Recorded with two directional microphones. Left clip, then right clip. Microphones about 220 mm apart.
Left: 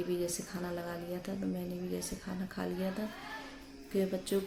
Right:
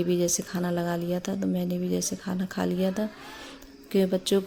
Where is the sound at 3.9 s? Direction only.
40° right (ahead or behind).